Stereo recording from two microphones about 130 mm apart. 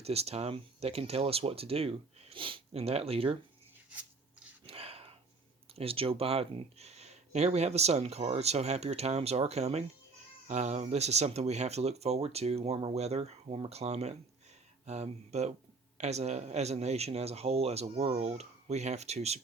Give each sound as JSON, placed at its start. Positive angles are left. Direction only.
{"t": 0.0, "sound": "speech", "side_deg": -50}
{"t": 4.6, "sound": "a sound", "side_deg": -50}
{"t": 5.7, "sound": "speech", "side_deg": -45}